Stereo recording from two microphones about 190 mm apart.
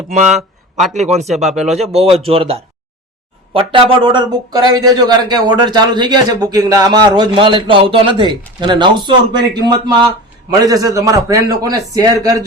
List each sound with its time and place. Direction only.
0.1 s a man's voice: 40° right (ahead or behind)
0.3 s a sound: centre (ahead or behind)
0.9 s a man's voice: 35° right (ahead or behind)
1.5 s speech: centre (ahead or behind)
1.8 s a man's voice: 30° right (ahead or behind)